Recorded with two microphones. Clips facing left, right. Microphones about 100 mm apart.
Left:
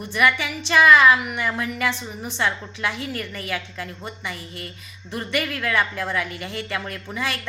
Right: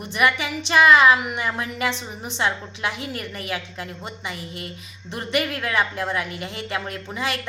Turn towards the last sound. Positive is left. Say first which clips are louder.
# right 1 dB
turn(degrees=-20)  # may be behind; listen again after turning